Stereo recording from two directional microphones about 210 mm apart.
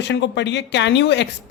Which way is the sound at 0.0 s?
55° left (ahead or behind).